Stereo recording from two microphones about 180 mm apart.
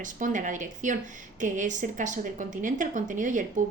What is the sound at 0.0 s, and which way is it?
Speech, 45° right (ahead or behind).